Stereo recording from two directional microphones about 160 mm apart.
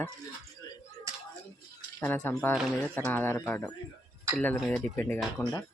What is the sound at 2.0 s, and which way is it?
Speech, 10° left (ahead or behind).